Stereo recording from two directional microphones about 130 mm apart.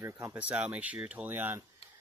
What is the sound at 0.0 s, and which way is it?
Speech, 20° right (ahead or behind).